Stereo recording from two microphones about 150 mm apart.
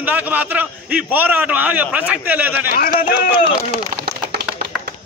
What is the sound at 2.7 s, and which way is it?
Speech, 75° left (ahead or behind).